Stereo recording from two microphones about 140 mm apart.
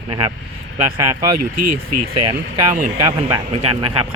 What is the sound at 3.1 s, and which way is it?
Speech, 40° right (ahead or behind).